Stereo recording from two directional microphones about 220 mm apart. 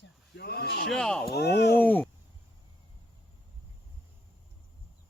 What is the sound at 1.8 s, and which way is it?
Speech, 10° left (ahead or behind).